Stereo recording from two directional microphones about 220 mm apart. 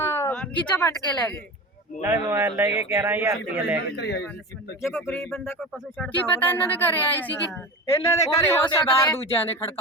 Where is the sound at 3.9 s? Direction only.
50° left (ahead or behind).